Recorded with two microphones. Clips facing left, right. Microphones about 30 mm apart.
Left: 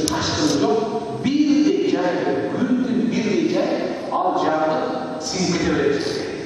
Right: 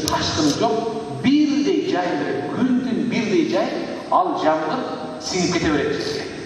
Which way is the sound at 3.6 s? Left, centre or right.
Centre.